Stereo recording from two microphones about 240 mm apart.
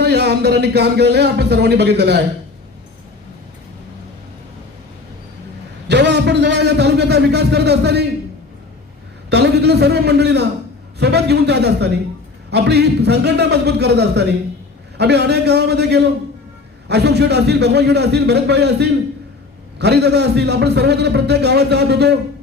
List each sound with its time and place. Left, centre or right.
0.0 s a man's voice: right
5.9 s a man's voice: right
9.3 s a man's voice: right